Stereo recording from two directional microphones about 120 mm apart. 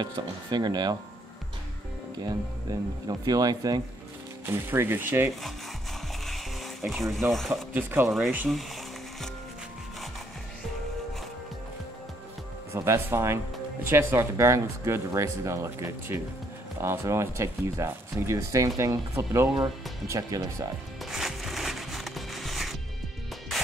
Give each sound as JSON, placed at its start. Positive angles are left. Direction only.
{"t": 0.0, "sound": "speech", "side_deg": -40}
{"t": 2.7, "sound": "speech", "side_deg": -30}
{"t": 4.5, "sound": "speech", "side_deg": -20}
{"t": 6.2, "sound": "music", "side_deg": 0}
{"t": 6.9, "sound": "speech", "side_deg": 0}
{"t": 7.7, "sound": "speech", "side_deg": -15}
{"t": 12.7, "sound": "speech", "side_deg": -20}
{"t": 21.0, "sound": "music", "side_deg": 0}